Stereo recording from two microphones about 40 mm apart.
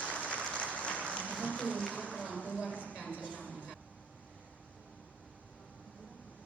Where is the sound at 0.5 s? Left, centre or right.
Left.